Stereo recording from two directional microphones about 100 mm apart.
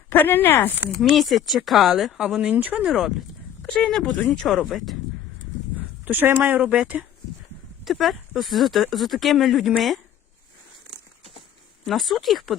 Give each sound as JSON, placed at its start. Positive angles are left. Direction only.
{"t": 0.1, "sound": "speech", "side_deg": 20}
{"t": 1.0, "sound": "speech", "side_deg": 0}
{"t": 2.9, "sound": "a sound", "side_deg": 0}
{"t": 3.7, "sound": "speech", "side_deg": 5}
{"t": 4.4, "sound": "speech", "side_deg": 0}
{"t": 6.1, "sound": "speech", "side_deg": -20}
{"t": 6.6, "sound": "speech", "side_deg": -10}
{"t": 7.9, "sound": "speech", "side_deg": 0}
{"t": 11.9, "sound": "speech", "side_deg": 0}